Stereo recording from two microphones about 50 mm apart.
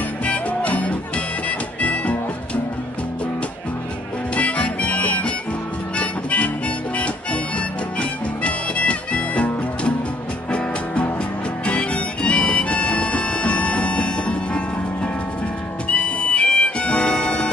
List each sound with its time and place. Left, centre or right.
0.2 s music: left
4.4 s harmonica: left
5.9 s music: left
15.9 s music: left